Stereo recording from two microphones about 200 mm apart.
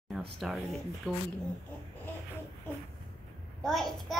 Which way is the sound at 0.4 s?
Centre (ahead or behind).